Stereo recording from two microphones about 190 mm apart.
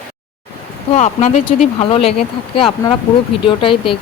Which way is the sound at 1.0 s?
40° left (ahead or behind).